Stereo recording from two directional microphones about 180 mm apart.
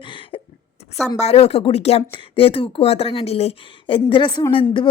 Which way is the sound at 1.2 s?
35° left (ahead or behind).